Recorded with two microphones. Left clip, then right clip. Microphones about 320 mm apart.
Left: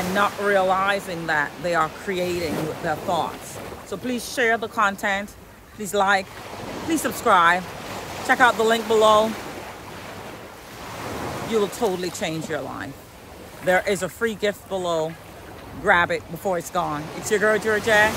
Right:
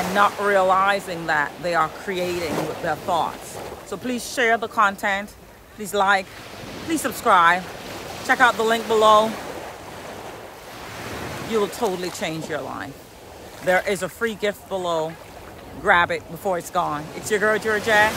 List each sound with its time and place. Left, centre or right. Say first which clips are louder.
0.1 s speech: right 2 dB; centre
6.6 s a sound: left 4 dB; left
6.9 s speech: right 1 dB; centre
7.8 s boat: left 1 dB; left
8.3 s speech: even; centre
11.5 s speech: even; centre